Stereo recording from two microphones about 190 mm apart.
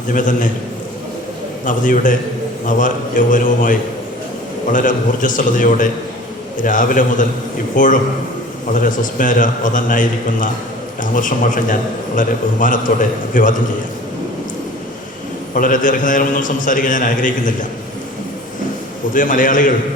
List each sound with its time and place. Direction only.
0.1 s a man's voice: 45° left (ahead or behind)
1.6 s a man's voice: 45° left (ahead or behind)
15.5 s a man's voice: 45° left (ahead or behind)
19.1 s a man's voice: 45° left (ahead or behind)